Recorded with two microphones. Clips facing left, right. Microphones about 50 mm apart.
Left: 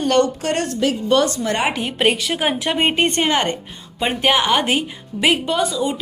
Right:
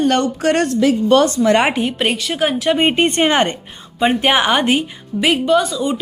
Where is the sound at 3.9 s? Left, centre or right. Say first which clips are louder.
Right 3 dB; centre.